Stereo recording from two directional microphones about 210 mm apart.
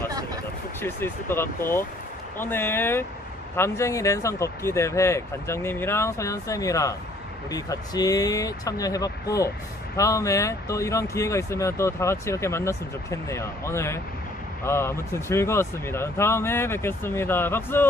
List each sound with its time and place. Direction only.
0.7 s speech: 10° left (ahead or behind)